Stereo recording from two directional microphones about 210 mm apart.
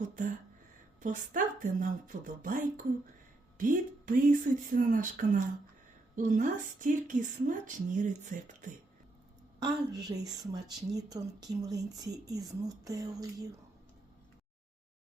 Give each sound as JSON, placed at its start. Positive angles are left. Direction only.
{"t": 0.0, "sound": "speech", "side_deg": -40}
{"t": 9.9, "sound": "speech", "side_deg": -15}